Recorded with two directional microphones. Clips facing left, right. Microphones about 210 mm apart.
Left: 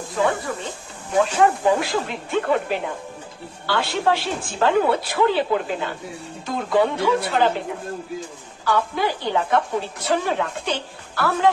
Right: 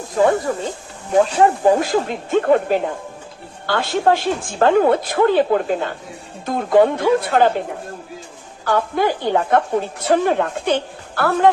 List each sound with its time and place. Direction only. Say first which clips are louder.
0.2 s a woman's voice: right 6 dB; 45° right (ahead or behind)
8.6 s a woman's voice: right 4 dB; 50° right (ahead or behind)